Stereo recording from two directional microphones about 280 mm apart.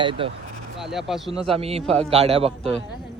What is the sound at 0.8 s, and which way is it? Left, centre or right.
Speech, centre.